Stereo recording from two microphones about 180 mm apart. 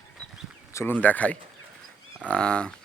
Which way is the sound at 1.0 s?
10° left (ahead or behind).